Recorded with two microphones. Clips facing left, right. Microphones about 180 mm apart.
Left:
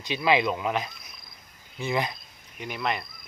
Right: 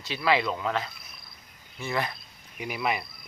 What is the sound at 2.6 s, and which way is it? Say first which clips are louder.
Speech: right 1 dB; 5° right (ahead or behind).